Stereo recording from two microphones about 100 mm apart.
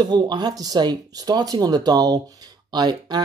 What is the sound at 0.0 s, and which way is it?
Speech, 45° right (ahead or behind).